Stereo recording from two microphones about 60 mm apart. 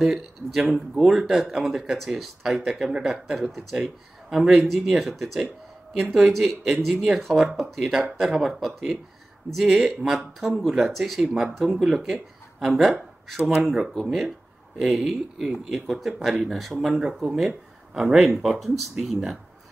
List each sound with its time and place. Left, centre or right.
0.0 s speech: centre
13.4 s speech: centre
13.7 s speech: centre